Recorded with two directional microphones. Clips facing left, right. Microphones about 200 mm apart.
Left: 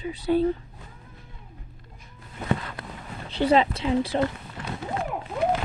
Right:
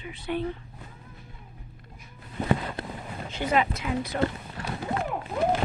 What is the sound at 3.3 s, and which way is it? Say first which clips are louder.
Speech: left 5 dB; 30° left (ahead or behind).